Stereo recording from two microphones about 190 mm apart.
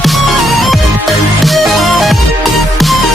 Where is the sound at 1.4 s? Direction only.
Centre (ahead or behind).